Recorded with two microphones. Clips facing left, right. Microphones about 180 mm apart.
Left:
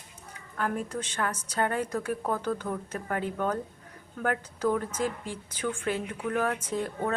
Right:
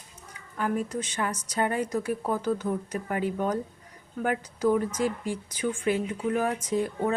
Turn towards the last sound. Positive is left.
turn(degrees=-10)  # may be behind; listen again after turning